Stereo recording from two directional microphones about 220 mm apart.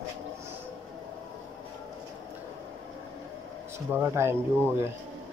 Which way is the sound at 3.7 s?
10° right (ahead or behind).